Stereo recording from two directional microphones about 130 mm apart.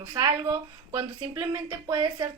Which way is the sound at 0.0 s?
25° right (ahead or behind).